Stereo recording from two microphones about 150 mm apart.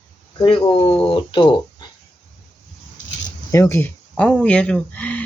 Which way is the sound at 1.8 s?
30° left (ahead or behind).